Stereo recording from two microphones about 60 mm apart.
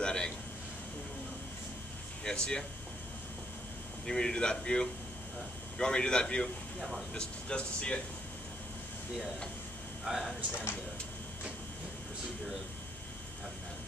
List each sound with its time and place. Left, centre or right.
0.0 s a sound: centre
2.2 s speech: centre
4.0 s speech: centre
6.8 s speech: centre
7.2 s speech: centre
10.0 s speech: centre
10.5 s speech: left